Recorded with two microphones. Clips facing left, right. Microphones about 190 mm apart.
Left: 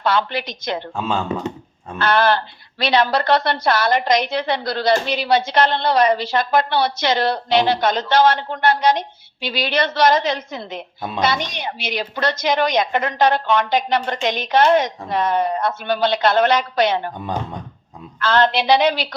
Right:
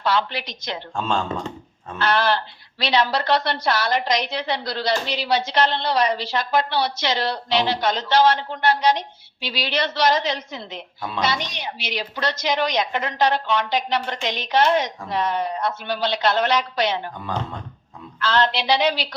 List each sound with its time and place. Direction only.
0.0 s speech: 50° left (ahead or behind)
0.9 s speech: 5° left (ahead or behind)
2.0 s speech: 55° left (ahead or behind)
17.2 s speech: 20° left (ahead or behind)
18.2 s speech: 50° left (ahead or behind)